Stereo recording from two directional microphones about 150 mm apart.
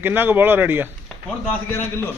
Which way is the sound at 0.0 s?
15° right (ahead or behind).